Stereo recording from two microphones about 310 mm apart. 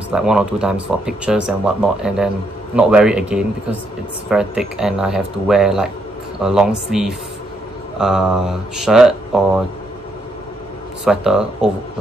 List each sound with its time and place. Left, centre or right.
0.1 s speech: centre
11.1 s speech: centre